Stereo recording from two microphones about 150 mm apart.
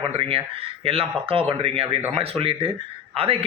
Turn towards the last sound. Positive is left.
turn(degrees=-40)  # may be behind; listen again after turning